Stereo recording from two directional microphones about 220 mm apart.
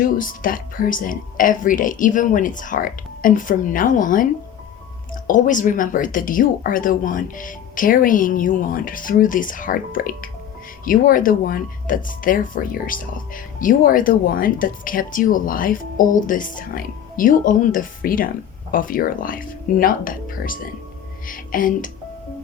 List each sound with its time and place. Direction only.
0.2 s speech: 40° left (ahead or behind)
5.3 s speech: 35° left (ahead or behind)